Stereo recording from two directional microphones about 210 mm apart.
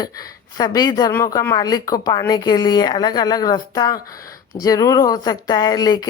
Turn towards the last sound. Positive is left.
turn(degrees=20)  # may be behind; listen again after turning